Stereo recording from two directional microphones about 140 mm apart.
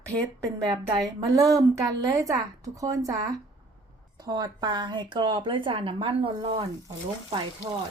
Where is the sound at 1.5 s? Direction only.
25° right (ahead or behind); by 6.6 s 40° right (ahead or behind).